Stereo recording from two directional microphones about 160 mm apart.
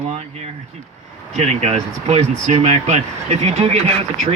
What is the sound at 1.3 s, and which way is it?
Speech, 45° right (ahead or behind).